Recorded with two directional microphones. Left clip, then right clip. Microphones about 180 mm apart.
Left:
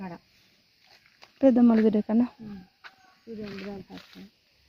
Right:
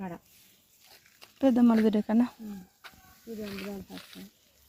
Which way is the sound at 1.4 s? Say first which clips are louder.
Left 4 dB; 30° left (ahead or behind).